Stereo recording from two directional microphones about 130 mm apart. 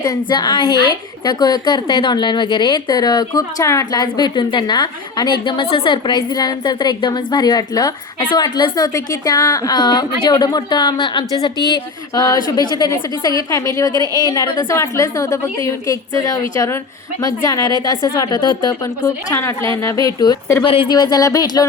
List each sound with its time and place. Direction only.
0.0 s a woman's voice: 35° left (ahead or behind)
20.7 s speech: 45° left (ahead or behind)
20.9 s a woman's voice: 30° left (ahead or behind)